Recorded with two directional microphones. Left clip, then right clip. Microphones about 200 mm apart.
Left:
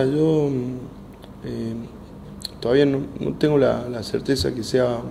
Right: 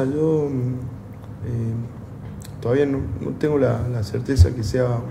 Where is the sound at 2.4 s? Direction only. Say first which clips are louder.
Left 2 dB; 35° left (ahead or behind).